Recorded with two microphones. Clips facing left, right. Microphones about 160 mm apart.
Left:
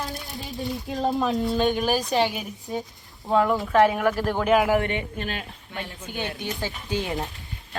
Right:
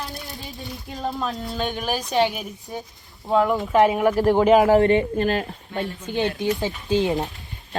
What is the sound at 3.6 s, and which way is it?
Speech, 20° right (ahead or behind).